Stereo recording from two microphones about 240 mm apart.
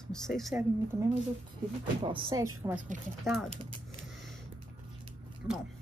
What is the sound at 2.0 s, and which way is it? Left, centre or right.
Speech, centre.